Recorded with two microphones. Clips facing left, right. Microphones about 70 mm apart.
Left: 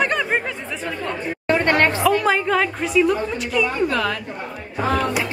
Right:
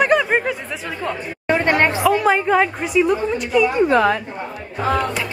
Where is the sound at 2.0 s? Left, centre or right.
Centre.